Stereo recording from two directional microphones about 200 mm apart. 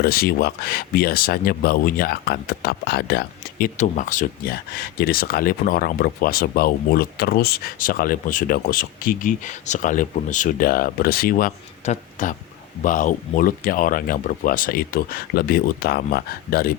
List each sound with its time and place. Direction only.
0.0 s speech: 50° left (ahead or behind)
3.8 s speech: 40° left (ahead or behind)